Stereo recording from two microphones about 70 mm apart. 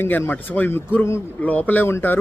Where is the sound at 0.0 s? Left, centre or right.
Left.